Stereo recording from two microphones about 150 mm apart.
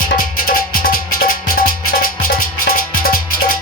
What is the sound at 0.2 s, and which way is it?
Music, 70° left (ahead or behind).